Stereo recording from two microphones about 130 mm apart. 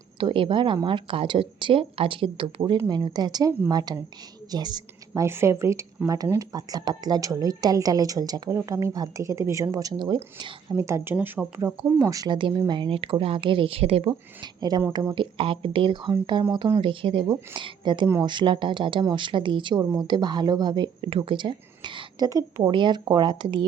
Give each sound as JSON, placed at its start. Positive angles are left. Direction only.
{"t": 0.2, "sound": "a woman's voice", "side_deg": -40}
{"t": 5.2, "sound": "speech", "side_deg": -20}
{"t": 10.8, "sound": "speech", "side_deg": -20}
{"t": 11.9, "sound": "speech", "side_deg": -25}
{"t": 14.4, "sound": "speech", "side_deg": -30}